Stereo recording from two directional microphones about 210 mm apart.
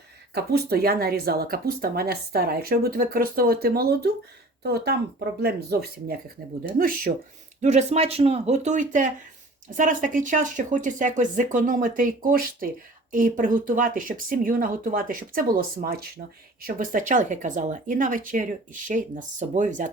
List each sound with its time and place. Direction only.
0.3 s speech: 50° right (ahead or behind)
6.7 s speech: 40° right (ahead or behind)